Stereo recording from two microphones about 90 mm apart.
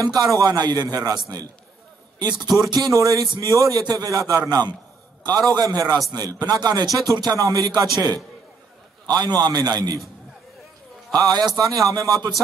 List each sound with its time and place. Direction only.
0.0 s a man's voice: 45° right (ahead or behind)
2.3 s speech: centre (ahead or behind)
2.6 s a man's voice: 50° right (ahead or behind)
2.9 s a man's voice: 40° right (ahead or behind)
11.1 s a man's voice: 45° right (ahead or behind)